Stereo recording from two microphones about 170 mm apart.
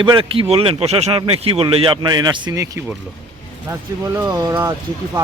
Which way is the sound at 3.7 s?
15° right (ahead or behind).